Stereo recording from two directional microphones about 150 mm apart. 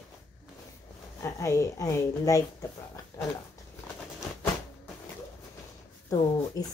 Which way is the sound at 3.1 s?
20° left (ahead or behind).